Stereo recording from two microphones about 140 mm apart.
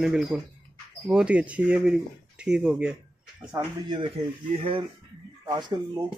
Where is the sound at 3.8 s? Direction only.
35° right (ahead or behind).